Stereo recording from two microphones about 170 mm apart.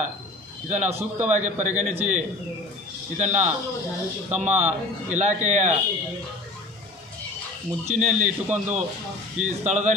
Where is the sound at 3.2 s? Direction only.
45° right (ahead or behind).